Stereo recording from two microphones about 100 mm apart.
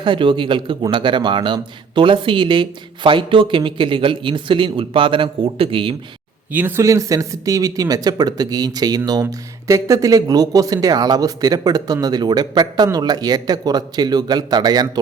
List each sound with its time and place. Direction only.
0.0 s speech: 55° right (ahead or behind)
6.5 s speech: 20° right (ahead or behind)
6.8 s speech: 35° right (ahead or behind)